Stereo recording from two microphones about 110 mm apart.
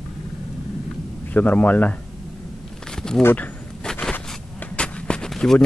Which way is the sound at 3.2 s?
20° left (ahead or behind).